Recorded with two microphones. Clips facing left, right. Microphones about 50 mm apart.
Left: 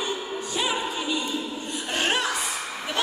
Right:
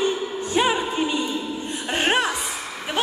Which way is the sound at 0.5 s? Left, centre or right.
Right.